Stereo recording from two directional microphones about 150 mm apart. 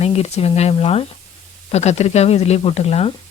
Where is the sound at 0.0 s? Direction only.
45° left (ahead or behind).